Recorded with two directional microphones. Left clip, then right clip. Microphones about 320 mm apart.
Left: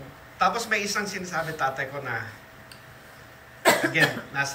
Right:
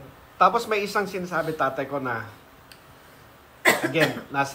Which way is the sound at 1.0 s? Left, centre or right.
Centre.